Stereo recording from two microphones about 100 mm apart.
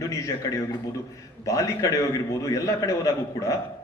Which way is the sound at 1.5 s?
30° left (ahead or behind).